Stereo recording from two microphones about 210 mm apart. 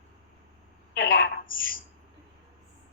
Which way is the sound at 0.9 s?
55° left (ahead or behind).